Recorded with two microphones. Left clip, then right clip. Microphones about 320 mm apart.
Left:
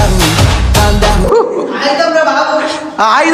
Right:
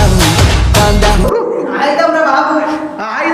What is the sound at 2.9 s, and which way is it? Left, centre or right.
Speech, centre.